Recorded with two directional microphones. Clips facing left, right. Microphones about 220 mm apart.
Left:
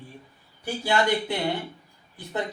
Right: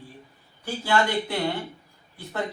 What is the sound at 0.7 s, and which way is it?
Speech, 15° left (ahead or behind).